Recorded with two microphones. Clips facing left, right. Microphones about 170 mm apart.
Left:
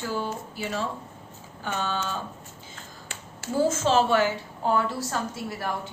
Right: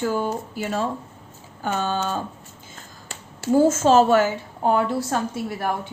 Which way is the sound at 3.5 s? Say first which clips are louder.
Right 6 dB; 45° right (ahead or behind).